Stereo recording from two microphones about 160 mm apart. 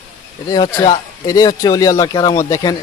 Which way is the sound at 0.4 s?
25° left (ahead or behind).